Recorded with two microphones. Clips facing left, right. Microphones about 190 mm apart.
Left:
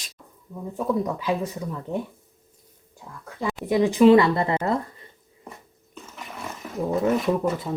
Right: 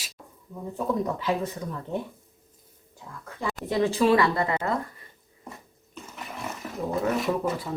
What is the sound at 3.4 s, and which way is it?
Speech, 15° left (ahead or behind).